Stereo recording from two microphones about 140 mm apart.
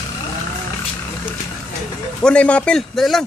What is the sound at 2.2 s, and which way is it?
A man's voice, 10° left (ahead or behind).